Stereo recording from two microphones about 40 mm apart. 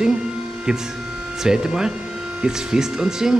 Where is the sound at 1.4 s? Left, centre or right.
Centre.